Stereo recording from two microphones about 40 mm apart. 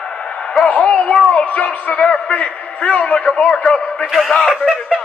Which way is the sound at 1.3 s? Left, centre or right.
Left.